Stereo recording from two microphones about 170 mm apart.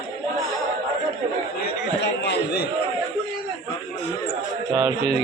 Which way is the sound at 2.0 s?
80° left.